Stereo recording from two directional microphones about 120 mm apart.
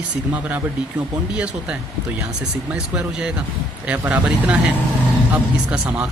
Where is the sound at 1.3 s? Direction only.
10° right (ahead or behind).